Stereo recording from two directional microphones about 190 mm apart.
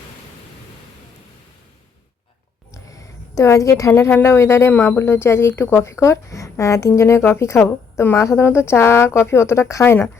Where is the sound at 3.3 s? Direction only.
15° left (ahead or behind).